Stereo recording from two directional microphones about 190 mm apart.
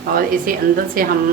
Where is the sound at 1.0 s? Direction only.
50° right (ahead or behind).